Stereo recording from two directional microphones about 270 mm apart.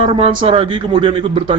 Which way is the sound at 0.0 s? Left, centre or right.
Right.